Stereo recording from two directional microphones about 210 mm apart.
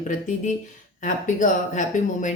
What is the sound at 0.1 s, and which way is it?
Speech, 35° left (ahead or behind).